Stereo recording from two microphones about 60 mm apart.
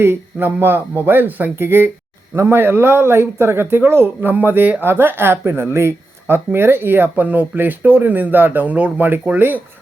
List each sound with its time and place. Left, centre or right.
0.0 s speech: right